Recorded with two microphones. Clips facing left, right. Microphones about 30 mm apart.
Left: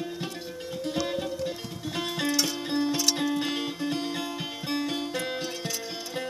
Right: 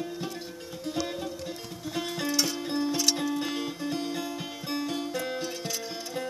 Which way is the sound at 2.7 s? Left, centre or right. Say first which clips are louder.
Left 2 dB; centre.